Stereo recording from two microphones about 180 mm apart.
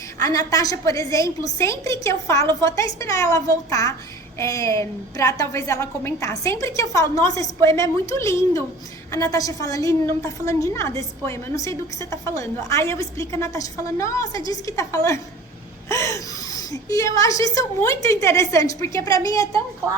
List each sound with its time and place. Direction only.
0.2 s a woman's voice: 20° left (ahead or behind)